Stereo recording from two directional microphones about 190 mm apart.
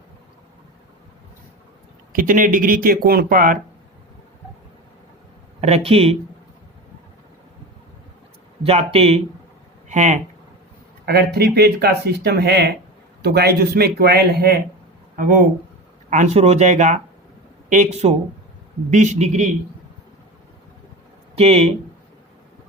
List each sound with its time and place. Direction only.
2.1 s speech: 45° right (ahead or behind)
5.5 s speech: 35° right (ahead or behind)
8.6 s speech: 35° right (ahead or behind)
11.0 s speech: 55° right (ahead or behind); by 19.5 s 40° right (ahead or behind)
21.3 s speech: 30° right (ahead or behind)